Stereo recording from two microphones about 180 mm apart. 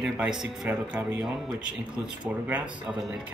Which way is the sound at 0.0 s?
5° right (ahead or behind).